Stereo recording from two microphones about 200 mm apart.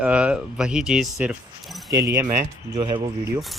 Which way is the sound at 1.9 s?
15° right (ahead or behind).